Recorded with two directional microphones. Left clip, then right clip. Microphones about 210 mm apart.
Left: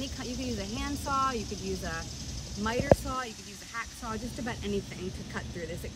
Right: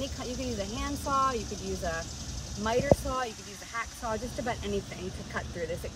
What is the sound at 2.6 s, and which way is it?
Speech, centre (ahead or behind).